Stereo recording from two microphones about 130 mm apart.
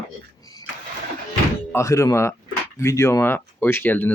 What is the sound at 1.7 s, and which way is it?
Speech, 20° left (ahead or behind).